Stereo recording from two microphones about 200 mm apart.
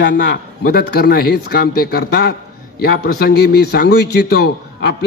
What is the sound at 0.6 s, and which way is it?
A man's voice, 50° left (ahead or behind).